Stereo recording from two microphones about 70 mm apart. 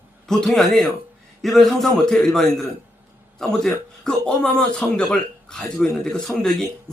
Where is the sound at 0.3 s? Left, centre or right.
Centre.